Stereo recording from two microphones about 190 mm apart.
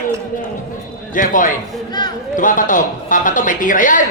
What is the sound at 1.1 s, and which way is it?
Speech, 45° left (ahead or behind).